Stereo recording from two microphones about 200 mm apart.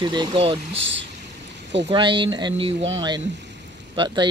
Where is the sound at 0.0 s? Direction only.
20° right (ahead or behind).